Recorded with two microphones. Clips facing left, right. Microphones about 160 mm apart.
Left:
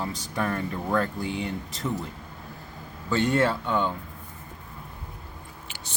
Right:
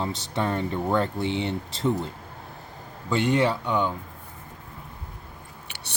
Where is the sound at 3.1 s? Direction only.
15° right (ahead or behind).